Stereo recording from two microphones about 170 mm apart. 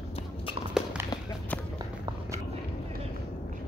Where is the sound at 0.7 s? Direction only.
5° right (ahead or behind).